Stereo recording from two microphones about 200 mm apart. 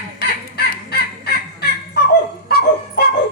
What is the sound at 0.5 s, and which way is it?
Fowl, 50° left (ahead or behind).